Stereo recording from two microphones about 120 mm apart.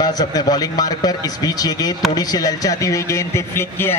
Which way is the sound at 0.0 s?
35° left (ahead or behind).